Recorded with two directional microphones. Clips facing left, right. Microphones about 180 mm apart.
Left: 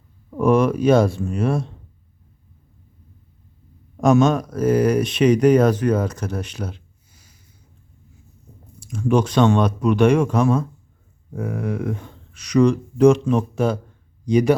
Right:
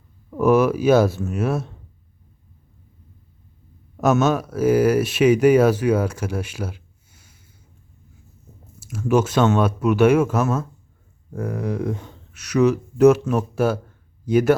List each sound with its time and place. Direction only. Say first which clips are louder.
0.3 s speech: even; 5° right (ahead or behind)
4.0 s speech: left 2 dB; 5° right (ahead or behind)
8.8 s speech: even; 5° right (ahead or behind)